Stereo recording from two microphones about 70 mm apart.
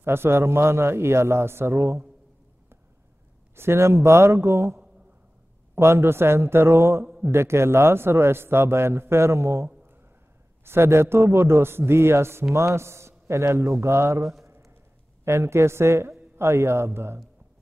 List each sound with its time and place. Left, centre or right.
0.0 s a man's voice: right
3.5 s a man's voice: right
5.8 s a man's voice: right